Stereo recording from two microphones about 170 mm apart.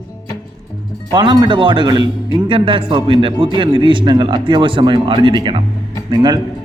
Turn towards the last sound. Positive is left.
turn(degrees=-25)  # may be behind; listen again after turning